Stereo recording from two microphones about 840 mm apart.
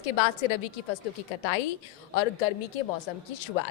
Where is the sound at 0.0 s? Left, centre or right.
Left.